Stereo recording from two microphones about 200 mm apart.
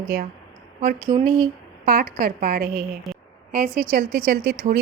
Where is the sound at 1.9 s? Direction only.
50° right (ahead or behind).